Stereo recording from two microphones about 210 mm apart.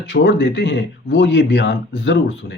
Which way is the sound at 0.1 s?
55° left (ahead or behind).